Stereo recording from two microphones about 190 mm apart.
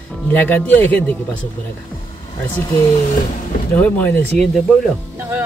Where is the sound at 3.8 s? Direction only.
10° left (ahead or behind).